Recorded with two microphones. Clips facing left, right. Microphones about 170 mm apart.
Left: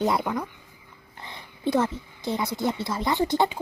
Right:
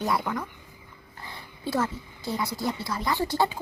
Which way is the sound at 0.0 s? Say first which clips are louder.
Left 3 dB; 20° left (ahead or behind).